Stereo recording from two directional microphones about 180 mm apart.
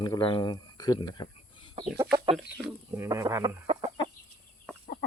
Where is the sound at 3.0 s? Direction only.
15° right (ahead or behind).